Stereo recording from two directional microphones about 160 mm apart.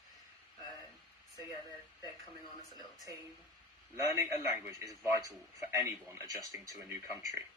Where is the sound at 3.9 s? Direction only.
15° right (ahead or behind).